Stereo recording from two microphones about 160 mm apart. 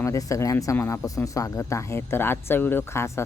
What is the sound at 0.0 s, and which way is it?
Speech, 20° left (ahead or behind).